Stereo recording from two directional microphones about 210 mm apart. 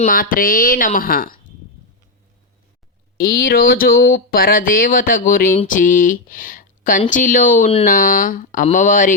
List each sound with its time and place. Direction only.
0.0 s a woman's voice: 40° left (ahead or behind)
3.2 s a woman's voice: 45° left (ahead or behind)